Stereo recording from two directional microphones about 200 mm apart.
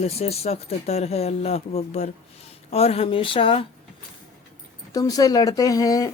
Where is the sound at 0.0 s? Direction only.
30° left (ahead or behind).